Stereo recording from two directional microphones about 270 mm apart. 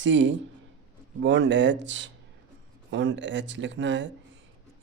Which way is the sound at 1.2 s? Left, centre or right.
Right.